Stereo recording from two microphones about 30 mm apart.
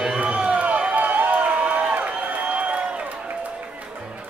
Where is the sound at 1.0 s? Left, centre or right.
Right.